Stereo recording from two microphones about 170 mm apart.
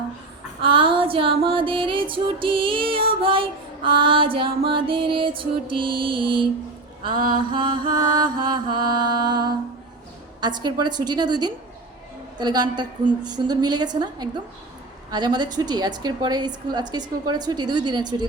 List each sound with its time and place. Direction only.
0.6 s music: 30° right (ahead or behind)
7.3 s a woman's voice: 25° right (ahead or behind)